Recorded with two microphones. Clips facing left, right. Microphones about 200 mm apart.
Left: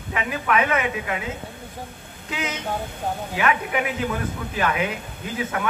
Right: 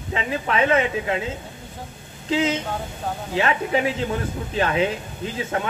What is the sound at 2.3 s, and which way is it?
A man's voice, 30° right (ahead or behind).